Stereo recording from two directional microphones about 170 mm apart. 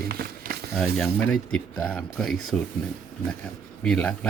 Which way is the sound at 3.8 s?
5° left (ahead or behind).